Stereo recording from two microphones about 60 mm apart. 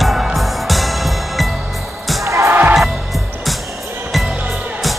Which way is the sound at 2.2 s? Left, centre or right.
Right.